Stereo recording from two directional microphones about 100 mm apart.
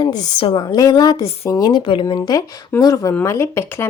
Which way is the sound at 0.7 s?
40° left (ahead or behind).